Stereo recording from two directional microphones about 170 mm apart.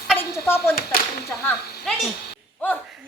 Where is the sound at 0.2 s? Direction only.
15° left (ahead or behind).